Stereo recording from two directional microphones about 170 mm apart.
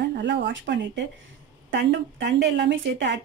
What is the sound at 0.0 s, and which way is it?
Speech, 90° right.